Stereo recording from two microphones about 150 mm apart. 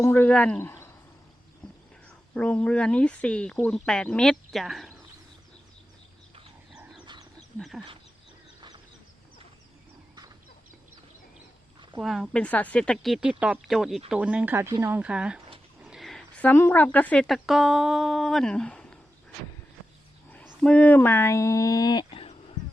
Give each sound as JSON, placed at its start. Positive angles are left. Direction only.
{"t": 0.0, "sound": "speech", "side_deg": 15}
{"t": 2.0, "sound": "speech", "side_deg": 5}
{"t": 7.0, "sound": "dog", "side_deg": -30}
{"t": 7.3, "sound": "dog", "side_deg": 0}
{"t": 12.0, "sound": "speech", "side_deg": 0}
{"t": 20.6, "sound": "speech", "side_deg": 10}
{"t": 22.1, "sound": "a sound", "side_deg": 40}